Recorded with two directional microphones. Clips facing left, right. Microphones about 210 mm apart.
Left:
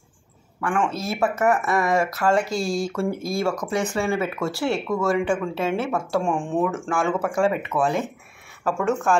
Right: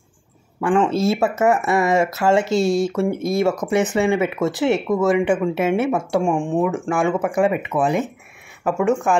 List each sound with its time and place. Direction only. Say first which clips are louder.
0.6 s speech: right 7 dB; 25° right (ahead or behind)
6.2 s speech: right 4 dB; 10° right (ahead or behind)